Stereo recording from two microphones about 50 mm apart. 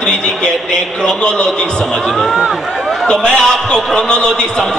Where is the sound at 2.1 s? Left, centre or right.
Centre.